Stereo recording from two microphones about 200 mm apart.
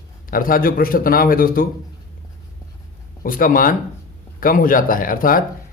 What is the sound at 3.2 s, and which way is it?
Speech, 45° left (ahead or behind).